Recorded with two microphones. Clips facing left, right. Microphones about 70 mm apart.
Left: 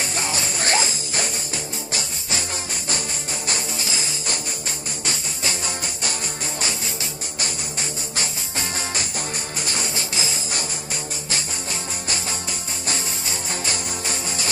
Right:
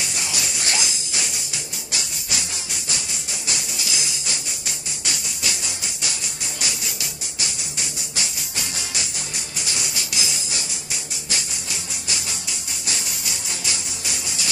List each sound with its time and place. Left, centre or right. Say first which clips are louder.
0.0 s music: left 3 dB; left
3.4 s music: left 2 dB; left
6.6 s music: even; left
12.8 s music: left 3 dB; left